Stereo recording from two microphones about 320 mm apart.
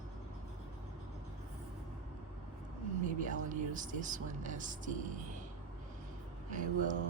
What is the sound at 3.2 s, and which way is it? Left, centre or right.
Speech, right.